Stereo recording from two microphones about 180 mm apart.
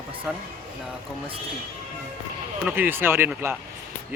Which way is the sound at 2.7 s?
10° right (ahead or behind).